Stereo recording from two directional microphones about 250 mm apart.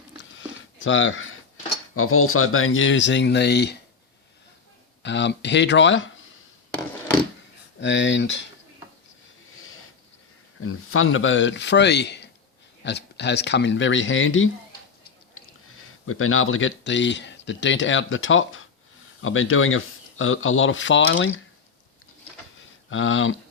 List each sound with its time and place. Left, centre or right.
0.2 s a sound: left
2.0 s speech: left
5.0 s speech: left
7.8 s speech: left
9.6 s a sound: left
10.6 s speech: left
22.9 s speech: left